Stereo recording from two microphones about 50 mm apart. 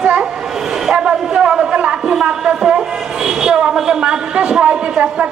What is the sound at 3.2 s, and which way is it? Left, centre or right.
A man's voice, centre.